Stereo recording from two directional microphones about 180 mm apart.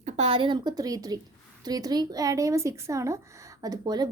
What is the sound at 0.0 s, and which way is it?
A woman's voice, 35° right (ahead or behind).